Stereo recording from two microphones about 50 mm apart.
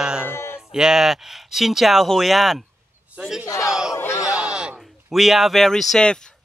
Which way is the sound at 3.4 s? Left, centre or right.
Left.